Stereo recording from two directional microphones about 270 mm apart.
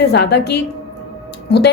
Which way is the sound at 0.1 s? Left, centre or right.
Left.